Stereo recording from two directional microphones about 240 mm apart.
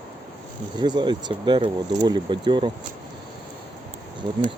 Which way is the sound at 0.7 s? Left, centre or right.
Centre.